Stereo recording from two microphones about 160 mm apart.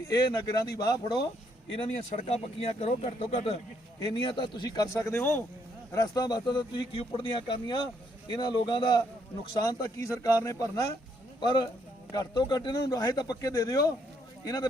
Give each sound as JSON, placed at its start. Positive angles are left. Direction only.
{"t": 0.1, "sound": "speech", "side_deg": 25}
{"t": 2.0, "sound": "speech", "side_deg": 45}